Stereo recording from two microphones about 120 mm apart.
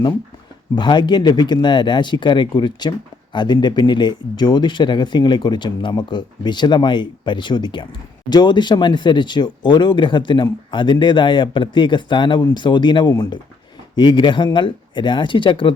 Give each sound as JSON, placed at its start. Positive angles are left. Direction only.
{"t": 0.8, "sound": "speech", "side_deg": 40}